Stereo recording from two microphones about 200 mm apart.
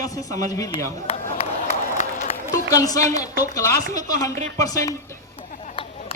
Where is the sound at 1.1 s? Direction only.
30° left (ahead or behind).